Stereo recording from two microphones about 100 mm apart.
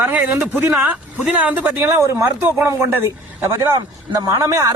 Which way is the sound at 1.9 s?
30° right (ahead or behind).